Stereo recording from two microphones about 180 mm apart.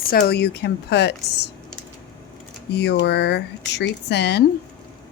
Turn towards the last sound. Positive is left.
turn(degrees=65)  # may be behind; listen again after turning